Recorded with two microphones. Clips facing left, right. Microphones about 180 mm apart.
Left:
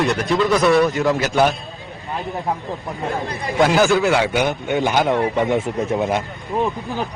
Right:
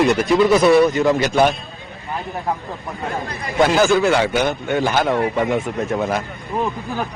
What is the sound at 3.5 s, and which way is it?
A man's voice, centre (ahead or behind).